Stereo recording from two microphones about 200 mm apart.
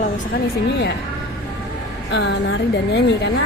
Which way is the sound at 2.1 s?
60° left (ahead or behind).